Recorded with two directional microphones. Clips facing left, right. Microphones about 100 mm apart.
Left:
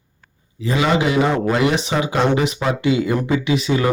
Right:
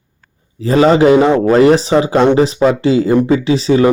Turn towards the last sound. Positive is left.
turn(degrees=-30)  # may be behind; listen again after turning